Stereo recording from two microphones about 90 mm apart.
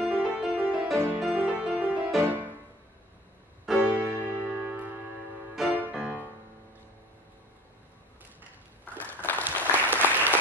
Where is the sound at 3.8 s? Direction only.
15° right (ahead or behind).